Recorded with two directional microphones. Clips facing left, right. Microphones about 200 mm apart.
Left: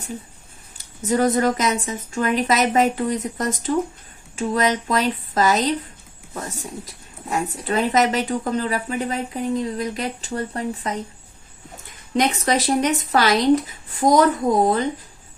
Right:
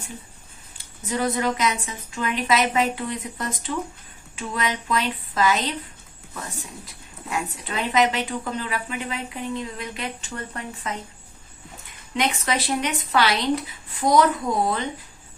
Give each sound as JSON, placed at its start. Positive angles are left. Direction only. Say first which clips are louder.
{"t": 1.0, "sound": "a woman's voice", "louder": "left 6 dB", "side_deg": 45}
{"t": 6.8, "sound": "speech", "louder": "left 3 dB", "side_deg": 40}
{"t": 12.1, "sound": "a woman's voice", "louder": "left 5 dB", "side_deg": 40}